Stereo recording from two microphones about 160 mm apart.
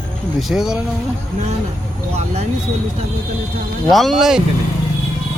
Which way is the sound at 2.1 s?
45° right (ahead or behind).